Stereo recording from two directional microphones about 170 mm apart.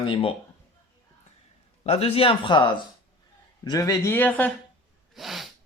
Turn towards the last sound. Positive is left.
turn(degrees=0)  # may be behind; listen again after turning